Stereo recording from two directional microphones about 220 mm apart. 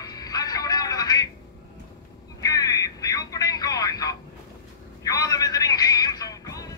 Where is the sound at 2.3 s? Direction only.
15° left (ahead or behind).